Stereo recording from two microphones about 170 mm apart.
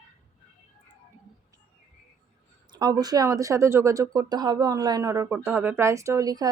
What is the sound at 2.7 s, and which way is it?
Speech, 25° right (ahead or behind).